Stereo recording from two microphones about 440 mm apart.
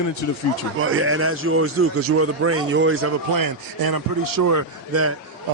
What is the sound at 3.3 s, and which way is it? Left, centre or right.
A man's voice, right.